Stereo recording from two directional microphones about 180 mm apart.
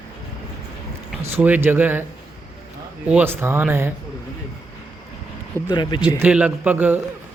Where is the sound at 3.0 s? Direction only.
10° right (ahead or behind).